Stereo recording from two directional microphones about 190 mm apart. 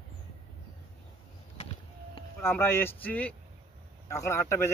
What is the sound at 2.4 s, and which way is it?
Speech, 15° left (ahead or behind).